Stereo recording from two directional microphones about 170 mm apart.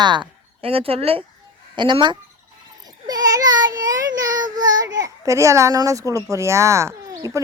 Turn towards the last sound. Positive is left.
turn(degrees=-15)  # may be behind; listen again after turning